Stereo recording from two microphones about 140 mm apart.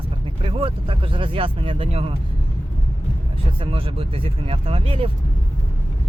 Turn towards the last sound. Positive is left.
turn(degrees=-40)  # may be behind; listen again after turning